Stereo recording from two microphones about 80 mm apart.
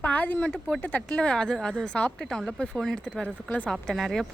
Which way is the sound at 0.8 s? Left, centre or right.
Centre.